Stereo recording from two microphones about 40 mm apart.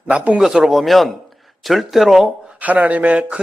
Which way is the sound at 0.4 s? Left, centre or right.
Centre.